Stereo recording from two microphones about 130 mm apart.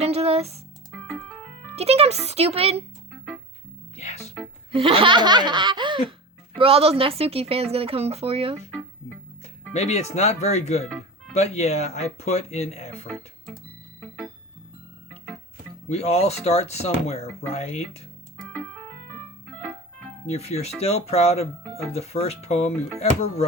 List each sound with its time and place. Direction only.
0.0 s music: 55° right (ahead or behind)
1.7 s a woman's voice: 55° right (ahead or behind)
3.9 s speech: 55° left (ahead or behind)
4.7 s speech: 45° right (ahead or behind)
6.6 s a woman's voice: 50° right (ahead or behind)
9.7 s speech: 60° left (ahead or behind)
15.9 s speech: 55° left (ahead or behind)
20.3 s speech: 55° left (ahead or behind)